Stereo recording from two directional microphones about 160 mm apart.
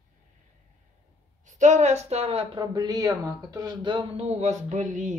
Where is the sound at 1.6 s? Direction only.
50° right (ahead or behind).